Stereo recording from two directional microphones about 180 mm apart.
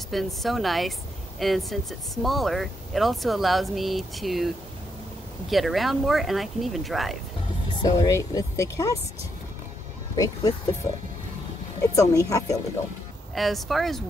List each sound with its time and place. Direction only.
0.1 s speech: centre (ahead or behind)
5.5 s speech: centre (ahead or behind)
7.8 s speech: 20° left (ahead or behind)
10.1 s speech: 20° left (ahead or behind)
13.3 s speech: centre (ahead or behind)